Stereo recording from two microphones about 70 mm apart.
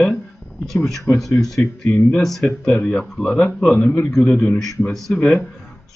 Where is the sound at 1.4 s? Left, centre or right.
Centre.